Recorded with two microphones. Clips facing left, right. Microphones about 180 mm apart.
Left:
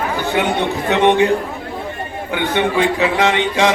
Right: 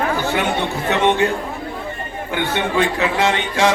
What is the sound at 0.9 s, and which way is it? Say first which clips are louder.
Speech: left 3 dB; 15° left (ahead or behind).